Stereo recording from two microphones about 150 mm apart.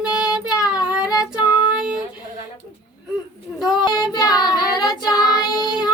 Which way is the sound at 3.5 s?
Centre (ahead or behind).